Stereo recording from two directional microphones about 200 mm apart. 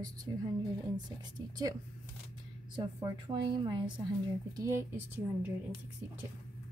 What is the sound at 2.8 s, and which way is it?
Speech, 20° right (ahead or behind).